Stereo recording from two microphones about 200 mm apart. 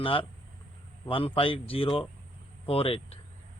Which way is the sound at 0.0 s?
25° left (ahead or behind).